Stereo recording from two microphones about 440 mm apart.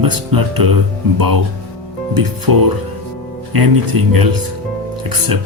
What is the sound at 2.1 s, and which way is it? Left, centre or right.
Speech, right.